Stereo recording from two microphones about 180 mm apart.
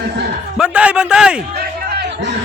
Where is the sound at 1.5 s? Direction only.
60° right (ahead or behind).